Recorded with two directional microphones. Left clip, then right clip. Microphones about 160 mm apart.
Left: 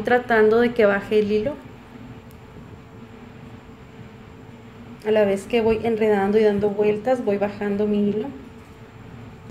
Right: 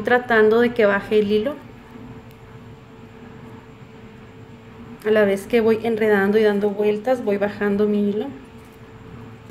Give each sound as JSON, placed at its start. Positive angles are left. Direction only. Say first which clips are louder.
{"t": 0.0, "sound": "a woman's voice", "louder": "right 1 dB", "side_deg": -5}
{"t": 5.0, "sound": "a woman's voice", "louder": "right 2 dB", "side_deg": -20}